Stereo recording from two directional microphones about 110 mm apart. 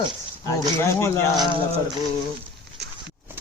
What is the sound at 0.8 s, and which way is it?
Speech, 25° left (ahead or behind).